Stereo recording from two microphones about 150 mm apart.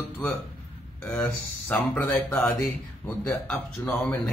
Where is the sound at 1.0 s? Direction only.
10° left (ahead or behind).